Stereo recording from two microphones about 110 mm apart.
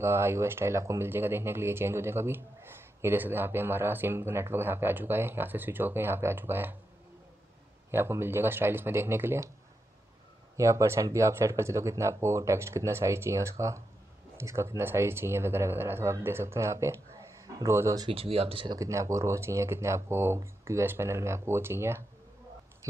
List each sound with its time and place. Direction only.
0.0 s speech: 25° right (ahead or behind)
7.9 s speech: 20° right (ahead or behind)
10.6 s speech: 25° right (ahead or behind)
18.0 s speech: 55° right (ahead or behind)
18.8 s speech: 30° right (ahead or behind)